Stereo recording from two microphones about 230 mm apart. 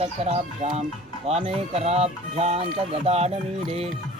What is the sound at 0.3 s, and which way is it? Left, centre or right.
Speech, right.